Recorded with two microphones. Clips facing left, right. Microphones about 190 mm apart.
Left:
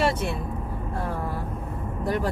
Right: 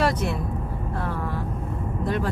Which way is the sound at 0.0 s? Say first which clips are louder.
Right 1 dB; 30° left (ahead or behind).